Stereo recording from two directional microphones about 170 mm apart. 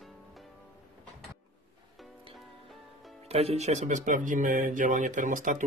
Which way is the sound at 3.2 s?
35° right (ahead or behind).